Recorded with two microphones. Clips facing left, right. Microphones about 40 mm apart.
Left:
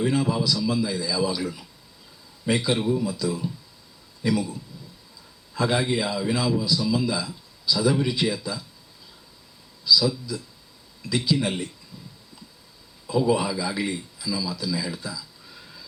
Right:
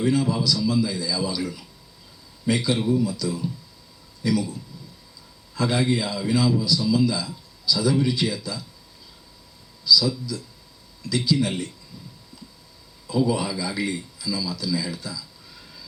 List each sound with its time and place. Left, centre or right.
0.0 s speech: left
5.5 s speech: centre
9.8 s speech: left
13.1 s speech: centre